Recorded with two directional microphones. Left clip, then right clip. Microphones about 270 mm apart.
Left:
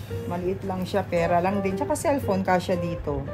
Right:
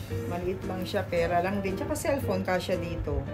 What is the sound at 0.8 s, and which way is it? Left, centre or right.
A woman's voice, left.